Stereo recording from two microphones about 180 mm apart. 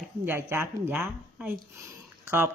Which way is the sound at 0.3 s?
15° right (ahead or behind).